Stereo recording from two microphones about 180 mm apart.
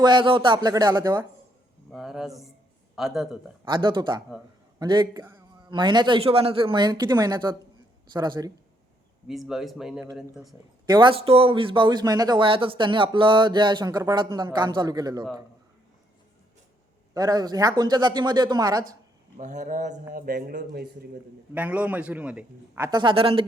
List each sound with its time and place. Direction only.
0.0 s speech: 25° right (ahead or behind)
1.9 s speech: centre (ahead or behind)
3.6 s speech: 25° right (ahead or behind)
9.2 s speech: centre (ahead or behind)
10.8 s speech: 25° right (ahead or behind)
17.2 s speech: 20° right (ahead or behind)
19.4 s speech: 40° right (ahead or behind); by 21.2 s 60° right (ahead or behind)
21.5 s a man's voice: 10° right (ahead or behind)
22.9 s speech: 25° right (ahead or behind)